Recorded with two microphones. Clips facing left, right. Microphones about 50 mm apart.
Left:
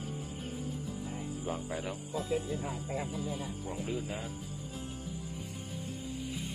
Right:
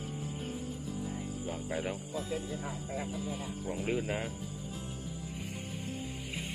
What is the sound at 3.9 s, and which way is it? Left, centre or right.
Speech, right.